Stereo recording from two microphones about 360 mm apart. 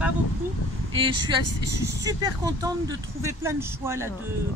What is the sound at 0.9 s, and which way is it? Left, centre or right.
Speech, centre.